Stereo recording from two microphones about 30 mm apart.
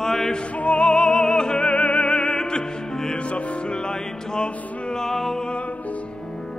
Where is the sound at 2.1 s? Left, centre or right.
Left.